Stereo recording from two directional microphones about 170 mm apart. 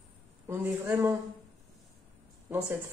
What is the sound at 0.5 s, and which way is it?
Speech, 15° right (ahead or behind).